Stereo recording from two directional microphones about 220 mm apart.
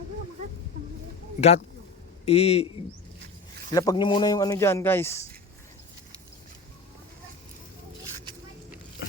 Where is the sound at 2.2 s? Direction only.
30° left (ahead or behind).